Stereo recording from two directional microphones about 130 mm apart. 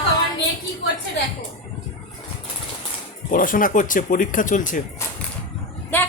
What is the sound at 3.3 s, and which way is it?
Speech, 90° left.